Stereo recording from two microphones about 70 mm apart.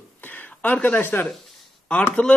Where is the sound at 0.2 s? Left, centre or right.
Left.